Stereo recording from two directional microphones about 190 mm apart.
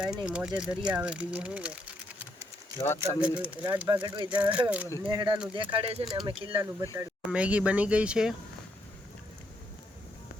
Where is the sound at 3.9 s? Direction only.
25° right (ahead or behind).